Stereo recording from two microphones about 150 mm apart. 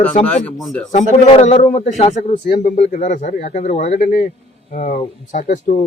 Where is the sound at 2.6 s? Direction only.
60° left (ahead or behind).